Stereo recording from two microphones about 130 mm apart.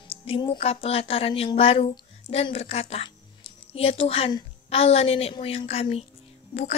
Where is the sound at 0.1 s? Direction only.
50° left (ahead or behind).